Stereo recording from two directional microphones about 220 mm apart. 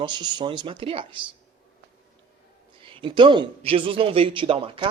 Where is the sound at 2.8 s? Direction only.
25° right (ahead or behind).